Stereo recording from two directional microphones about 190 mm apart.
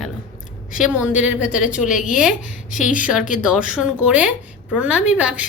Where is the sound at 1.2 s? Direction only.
5° right (ahead or behind).